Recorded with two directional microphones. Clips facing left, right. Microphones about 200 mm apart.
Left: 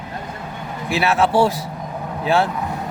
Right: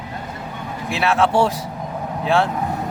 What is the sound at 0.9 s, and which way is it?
Speech, 5° left (ahead or behind).